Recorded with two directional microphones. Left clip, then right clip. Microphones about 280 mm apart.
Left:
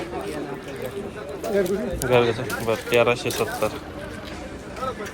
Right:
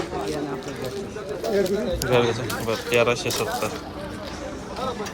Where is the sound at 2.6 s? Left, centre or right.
Centre.